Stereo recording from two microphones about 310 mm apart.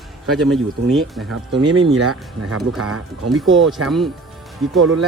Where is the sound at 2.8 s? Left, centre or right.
Right.